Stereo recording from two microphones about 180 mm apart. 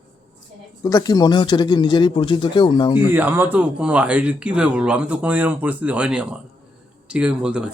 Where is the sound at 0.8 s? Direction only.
20° left (ahead or behind).